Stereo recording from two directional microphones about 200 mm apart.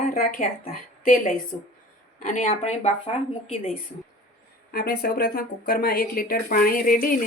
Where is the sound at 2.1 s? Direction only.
40° left (ahead or behind).